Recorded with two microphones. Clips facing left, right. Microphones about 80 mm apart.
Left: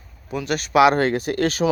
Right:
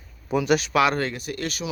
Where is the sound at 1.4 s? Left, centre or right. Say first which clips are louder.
Left 12 dB; left.